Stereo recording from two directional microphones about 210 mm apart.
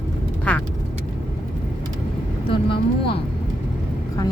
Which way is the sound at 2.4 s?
25° left (ahead or behind).